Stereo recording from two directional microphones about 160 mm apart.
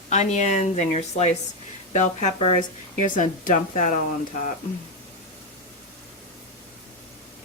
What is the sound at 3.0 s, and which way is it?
Speech, 55° left (ahead or behind).